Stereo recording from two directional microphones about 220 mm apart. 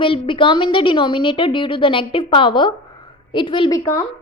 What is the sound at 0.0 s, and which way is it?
A woman's voice, 25° left (ahead or behind).